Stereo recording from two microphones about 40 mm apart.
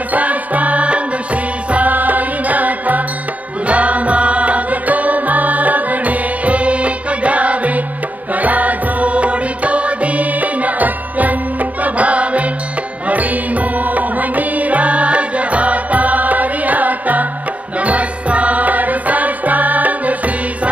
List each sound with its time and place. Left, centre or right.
0.1 s music: right